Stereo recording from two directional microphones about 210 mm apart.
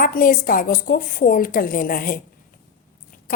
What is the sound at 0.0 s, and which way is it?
A woman's voice, 45° left (ahead or behind).